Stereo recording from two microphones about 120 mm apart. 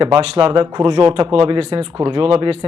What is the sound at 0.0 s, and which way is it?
Speech, 45° right (ahead or behind).